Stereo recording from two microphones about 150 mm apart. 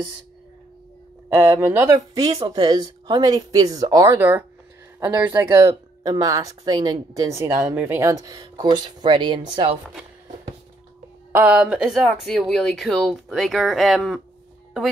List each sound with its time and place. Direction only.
1.3 s speech: 15° right (ahead or behind)
1.9 s speech: 25° right (ahead or behind)
4.2 s speech: 10° right (ahead or behind); by 9.8 s 30° right (ahead or behind)
11.3 s speech: 10° right (ahead or behind)